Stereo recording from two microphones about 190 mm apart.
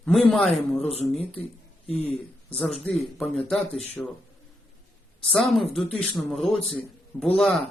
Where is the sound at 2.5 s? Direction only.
5° left (ahead or behind).